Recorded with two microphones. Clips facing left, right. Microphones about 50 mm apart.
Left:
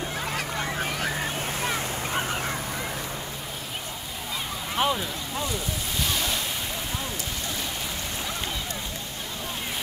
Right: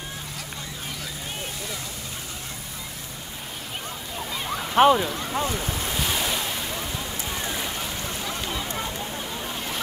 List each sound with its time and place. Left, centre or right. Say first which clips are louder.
0.6 s honk: left 7 dB; left
1.6 s boat: left 6 dB; left
4.7 s speech: right 9 dB; right
5.9 s waves: right 1 dB; centre